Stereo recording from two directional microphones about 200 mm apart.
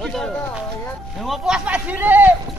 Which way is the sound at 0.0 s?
Centre (ahead or behind).